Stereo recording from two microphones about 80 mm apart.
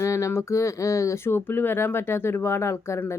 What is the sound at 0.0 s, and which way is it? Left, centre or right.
Speech, left.